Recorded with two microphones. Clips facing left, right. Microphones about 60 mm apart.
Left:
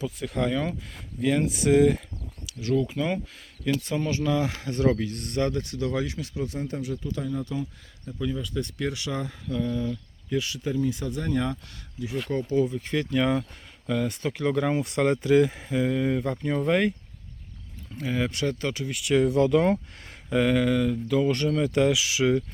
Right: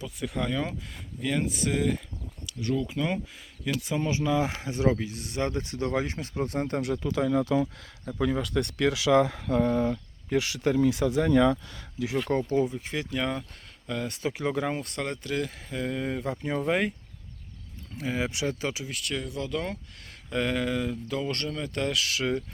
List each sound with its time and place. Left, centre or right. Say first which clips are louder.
0.0 s speech: left 4 dB; centre
5.4 s speech: left 2 dB; right
8.2 s speech: right 3 dB; right
9.5 s speech: right 4 dB; right
10.3 s speech: right 3 dB; right
12.4 s speech: left 5 dB; right
12.7 s speech: left 5 dB; centre
14.3 s speech: left 2 dB; centre
14.8 s speech: left 9 dB; centre
17.9 s speech: left 2 dB; centre
19.1 s speech: left 13 dB; left
20.3 s speech: left 5 dB; centre
21.2 s speech: left 9 dB; centre